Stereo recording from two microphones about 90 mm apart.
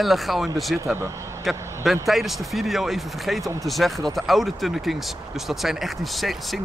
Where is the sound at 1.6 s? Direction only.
30° right (ahead or behind).